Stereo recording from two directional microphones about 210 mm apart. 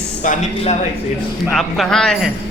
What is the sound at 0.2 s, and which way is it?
Speech, 35° left (ahead or behind).